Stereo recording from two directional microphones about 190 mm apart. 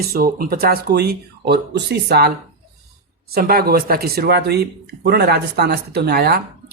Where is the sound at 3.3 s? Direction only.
55° right (ahead or behind).